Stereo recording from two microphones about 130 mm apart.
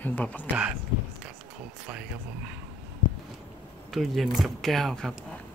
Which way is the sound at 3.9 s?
Centre (ahead or behind).